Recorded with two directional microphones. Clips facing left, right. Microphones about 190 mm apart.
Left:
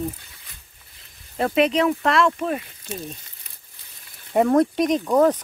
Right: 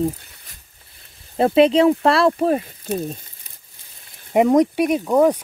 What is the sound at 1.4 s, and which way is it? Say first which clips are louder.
Speech: right 6 dB; 30° right (ahead or behind).